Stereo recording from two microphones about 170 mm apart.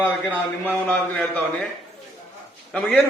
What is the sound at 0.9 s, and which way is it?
Speech, 10° left (ahead or behind).